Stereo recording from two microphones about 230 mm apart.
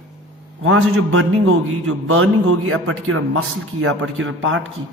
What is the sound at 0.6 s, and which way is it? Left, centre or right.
A man's voice, right.